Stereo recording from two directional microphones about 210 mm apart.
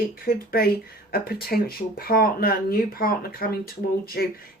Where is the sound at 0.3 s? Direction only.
45° left (ahead or behind).